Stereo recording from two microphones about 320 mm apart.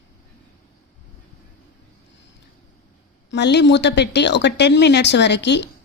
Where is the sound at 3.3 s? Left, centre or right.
Left.